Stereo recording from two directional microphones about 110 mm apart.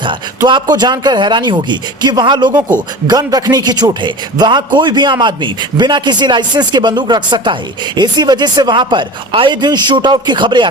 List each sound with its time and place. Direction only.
0.4 s a man's voice: 40° right (ahead or behind)